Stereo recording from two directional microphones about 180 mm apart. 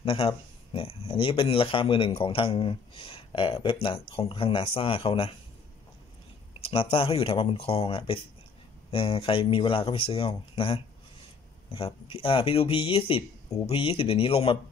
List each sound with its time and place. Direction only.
0.0 s speech: 30° left (ahead or behind)
6.6 s speech: 30° left (ahead or behind)